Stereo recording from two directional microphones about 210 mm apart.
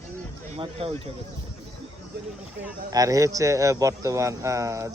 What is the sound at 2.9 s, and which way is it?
A man's voice, 15° right (ahead or behind).